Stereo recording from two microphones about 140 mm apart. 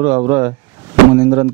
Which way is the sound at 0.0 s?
20° right (ahead or behind).